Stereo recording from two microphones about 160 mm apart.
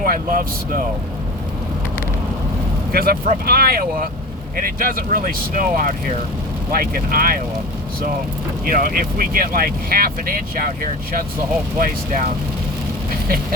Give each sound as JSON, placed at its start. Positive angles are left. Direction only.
{"t": 0.0, "sound": "speech", "side_deg": -60}
{"t": 2.9, "sound": "speech", "side_deg": -70}
{"t": 8.6, "sound": "speech", "side_deg": -65}
{"t": 11.8, "sound": "speech", "side_deg": -55}
{"t": 13.1, "sound": "a sound", "side_deg": -65}